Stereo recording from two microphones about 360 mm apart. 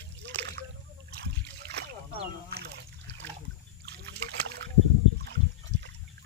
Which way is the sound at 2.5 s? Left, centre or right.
Right.